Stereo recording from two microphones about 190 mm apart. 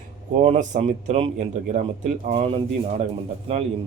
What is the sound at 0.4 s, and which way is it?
A man's voice, 35° right (ahead or behind).